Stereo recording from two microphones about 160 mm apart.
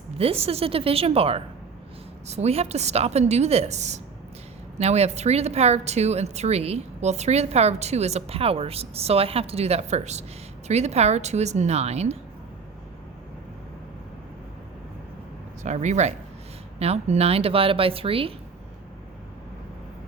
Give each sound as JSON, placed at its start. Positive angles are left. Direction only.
{"t": 0.2, "sound": "a woman's voice", "side_deg": -40}
{"t": 15.6, "sound": "a woman's voice", "side_deg": -45}